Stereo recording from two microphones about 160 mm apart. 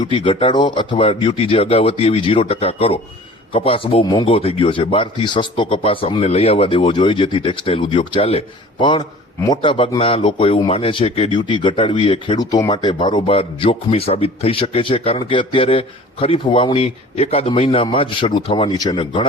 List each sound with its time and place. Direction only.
0.0 s a man's voice: 35° left (ahead or behind)